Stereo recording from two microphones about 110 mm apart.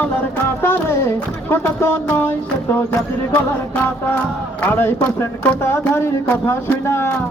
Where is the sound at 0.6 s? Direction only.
20° left (ahead or behind).